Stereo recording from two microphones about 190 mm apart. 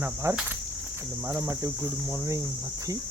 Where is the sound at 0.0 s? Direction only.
15° right (ahead or behind).